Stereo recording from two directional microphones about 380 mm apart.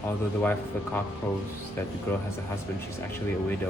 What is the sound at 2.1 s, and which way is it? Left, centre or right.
Speech, centre.